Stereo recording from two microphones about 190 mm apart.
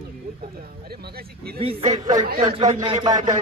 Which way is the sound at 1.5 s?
30° right (ahead or behind).